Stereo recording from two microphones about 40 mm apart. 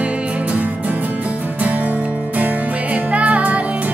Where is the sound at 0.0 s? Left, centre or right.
Right.